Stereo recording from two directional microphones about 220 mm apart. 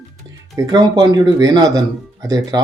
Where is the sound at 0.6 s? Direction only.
15° right (ahead or behind).